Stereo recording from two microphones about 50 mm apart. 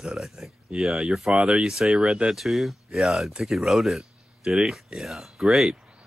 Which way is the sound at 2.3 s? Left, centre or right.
Centre.